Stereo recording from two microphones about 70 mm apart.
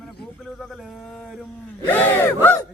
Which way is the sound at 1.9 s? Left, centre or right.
Left.